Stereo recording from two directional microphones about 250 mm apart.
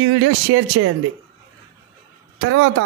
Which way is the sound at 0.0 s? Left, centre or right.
Right.